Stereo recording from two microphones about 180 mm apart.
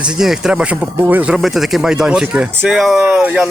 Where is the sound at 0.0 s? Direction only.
5° right (ahead or behind).